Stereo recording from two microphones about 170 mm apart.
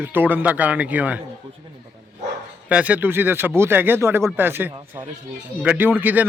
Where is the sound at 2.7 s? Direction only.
10° right (ahead or behind).